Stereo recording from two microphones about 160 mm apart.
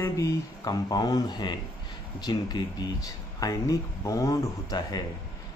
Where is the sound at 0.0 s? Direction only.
20° left (ahead or behind).